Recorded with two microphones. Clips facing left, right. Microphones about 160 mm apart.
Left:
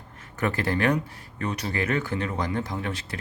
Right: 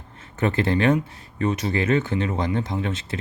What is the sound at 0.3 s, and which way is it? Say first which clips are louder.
Speech: right 4 dB; 25° right (ahead or behind).